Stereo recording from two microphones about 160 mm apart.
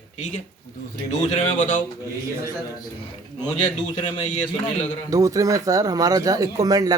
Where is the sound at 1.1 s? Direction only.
45° left (ahead or behind).